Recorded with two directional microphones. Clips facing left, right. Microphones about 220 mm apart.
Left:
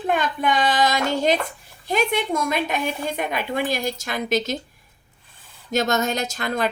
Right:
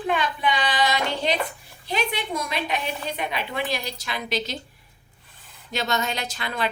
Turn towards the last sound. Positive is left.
turn(degrees=45)  # may be behind; listen again after turning